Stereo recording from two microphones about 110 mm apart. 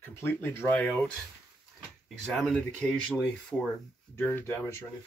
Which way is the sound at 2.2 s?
5° left (ahead or behind).